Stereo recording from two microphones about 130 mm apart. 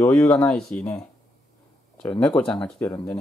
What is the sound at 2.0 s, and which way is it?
Speech, 10° left (ahead or behind).